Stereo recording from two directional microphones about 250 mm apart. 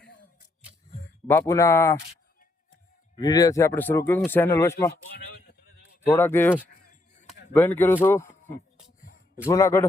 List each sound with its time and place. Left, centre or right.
1.3 s speech: centre
3.2 s speech: centre
6.1 s speech: centre
6.8 s chop: left
7.5 s speech: centre
9.5 s speech: centre